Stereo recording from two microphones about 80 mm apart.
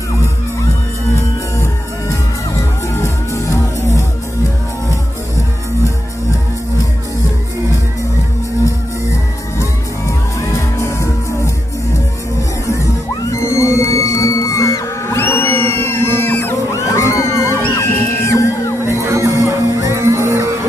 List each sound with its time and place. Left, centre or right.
2.9 s music: left
10.8 s music: left
13.3 s music: left
15.1 s music: left
16.9 s crowd: left
17.7 s music: left
18.9 s music: right